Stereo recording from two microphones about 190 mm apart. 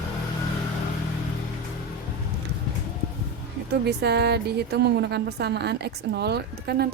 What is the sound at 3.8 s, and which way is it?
A woman's voice, 60° right (ahead or behind).